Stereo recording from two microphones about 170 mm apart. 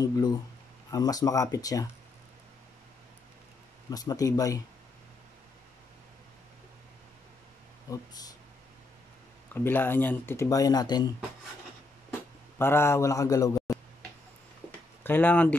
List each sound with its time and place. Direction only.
0.0 s a man's voice: 20° left (ahead or behind)
3.9 s a man's voice: 20° left (ahead or behind)
7.9 s a man's voice: 20° left (ahead or behind)
9.5 s speech: 10° left (ahead or behind)
12.5 s a man's voice: 15° left (ahead or behind)
15.0 s speech: 10° left (ahead or behind)